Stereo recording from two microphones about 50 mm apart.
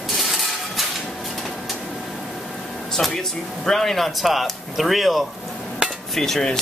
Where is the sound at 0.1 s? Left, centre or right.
Centre.